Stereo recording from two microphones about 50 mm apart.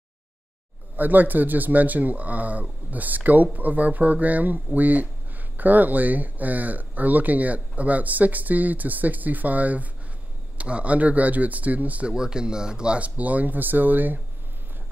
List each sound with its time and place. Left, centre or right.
0.9 s speech: right
12.1 s speech: centre; by 14.2 s right